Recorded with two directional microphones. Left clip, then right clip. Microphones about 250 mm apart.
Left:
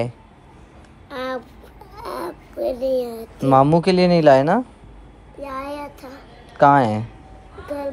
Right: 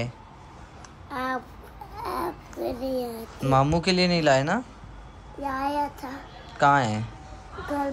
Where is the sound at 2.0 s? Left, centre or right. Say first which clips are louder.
Left 1 dB; centre.